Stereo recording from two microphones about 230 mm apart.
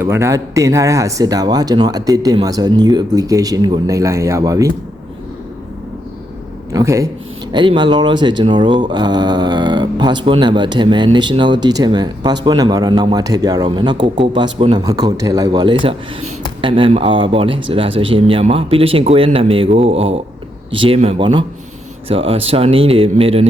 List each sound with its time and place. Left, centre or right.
0.0 s speech: centre
6.7 s speech: centre